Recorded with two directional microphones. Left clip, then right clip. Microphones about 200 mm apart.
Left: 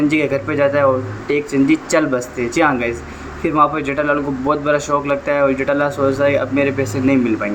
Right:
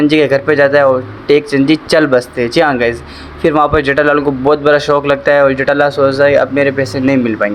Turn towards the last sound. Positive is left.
turn(degrees=-30)  # may be behind; listen again after turning